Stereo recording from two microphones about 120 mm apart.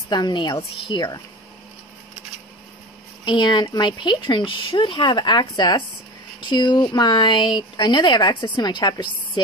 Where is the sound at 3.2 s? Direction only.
40° left (ahead or behind).